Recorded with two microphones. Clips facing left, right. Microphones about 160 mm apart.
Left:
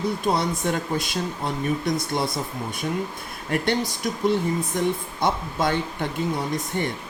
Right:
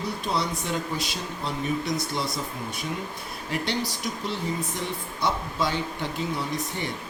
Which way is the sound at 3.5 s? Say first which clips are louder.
Left 5 dB; 50° left (ahead or behind).